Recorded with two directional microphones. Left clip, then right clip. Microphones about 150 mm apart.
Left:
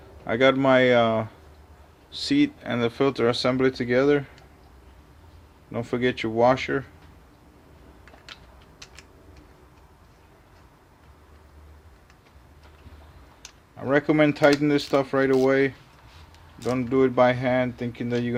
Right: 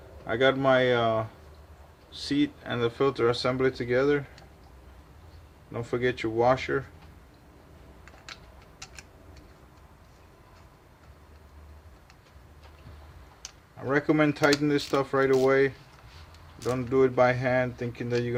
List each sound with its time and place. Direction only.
0.3 s speech: 45° left (ahead or behind)
5.7 s speech: 40° left (ahead or behind)
13.8 s speech: 40° left (ahead or behind)